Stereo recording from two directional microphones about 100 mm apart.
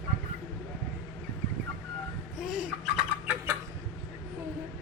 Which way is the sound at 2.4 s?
5° right (ahead or behind).